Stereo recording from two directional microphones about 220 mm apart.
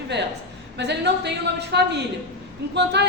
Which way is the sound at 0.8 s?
50° right (ahead or behind).